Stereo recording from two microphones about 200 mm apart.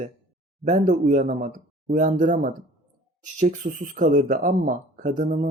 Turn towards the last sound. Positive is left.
turn(degrees=-40)  # may be behind; listen again after turning